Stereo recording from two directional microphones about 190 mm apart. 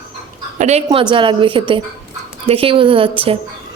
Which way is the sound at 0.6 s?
35° right (ahead or behind).